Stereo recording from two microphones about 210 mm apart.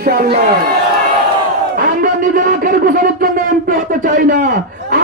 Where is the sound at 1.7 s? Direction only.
40° right (ahead or behind).